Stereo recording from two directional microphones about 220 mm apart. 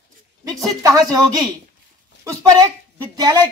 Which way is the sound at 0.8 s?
15° right (ahead or behind).